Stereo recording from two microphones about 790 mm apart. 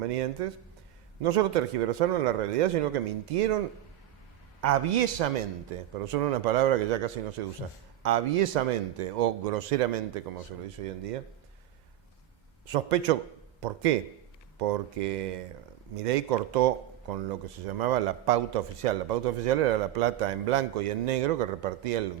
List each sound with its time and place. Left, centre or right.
0.0 s speech: right
4.6 s speech: right
12.6 s speech: right